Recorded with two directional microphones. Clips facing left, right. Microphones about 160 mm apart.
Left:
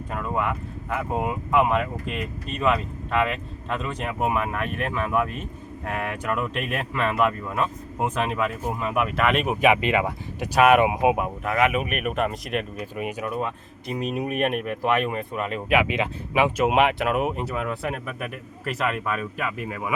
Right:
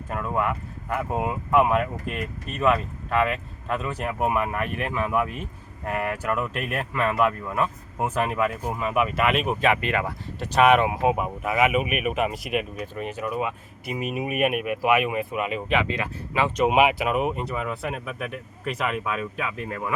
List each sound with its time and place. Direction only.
0.1 s speech: 5° right (ahead or behind)
9.6 s speech: 15° left (ahead or behind)
11.2 s speech: 5° right (ahead or behind)
13.0 s speech: 10° left (ahead or behind)
13.2 s speech: 5° right (ahead or behind)
15.7 s speech: 10° left (ahead or behind)
16.6 s speech: centre (ahead or behind)